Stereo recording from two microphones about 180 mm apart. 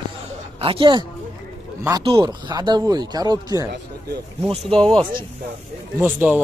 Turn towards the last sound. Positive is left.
turn(degrees=-10)  # may be behind; listen again after turning